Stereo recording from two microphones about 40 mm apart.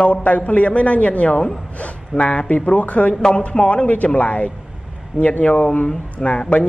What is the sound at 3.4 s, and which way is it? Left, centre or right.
A man's voice, left.